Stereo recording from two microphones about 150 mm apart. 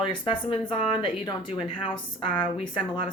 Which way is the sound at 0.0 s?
35° left (ahead or behind).